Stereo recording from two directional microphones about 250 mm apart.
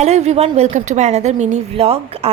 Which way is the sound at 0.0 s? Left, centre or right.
Right.